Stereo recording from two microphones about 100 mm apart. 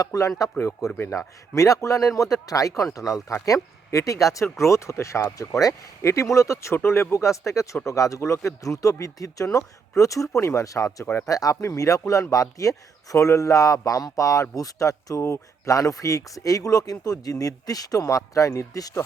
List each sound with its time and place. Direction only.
0.0 s speech: 35° left (ahead or behind)
1.5 s speech: 35° left (ahead or behind)
11.0 s speech: 20° left (ahead or behind)
11.3 s speech: 35° left (ahead or behind)